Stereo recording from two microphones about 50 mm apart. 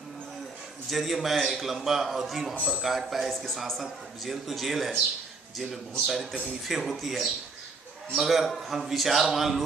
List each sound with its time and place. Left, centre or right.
0.9 s a man's voice: centre
2.6 s speech: right
2.8 s a man's voice: centre
6.1 s a man's voice: centre